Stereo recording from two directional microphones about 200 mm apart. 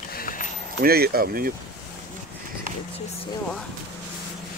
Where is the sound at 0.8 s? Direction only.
50° right (ahead or behind).